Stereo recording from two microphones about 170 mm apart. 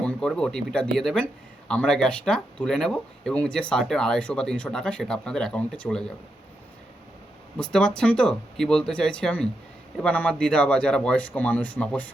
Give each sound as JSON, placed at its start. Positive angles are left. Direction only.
{"t": 0.0, "sound": "speech", "side_deg": 5}
{"t": 7.6, "sound": "a man's voice", "side_deg": 5}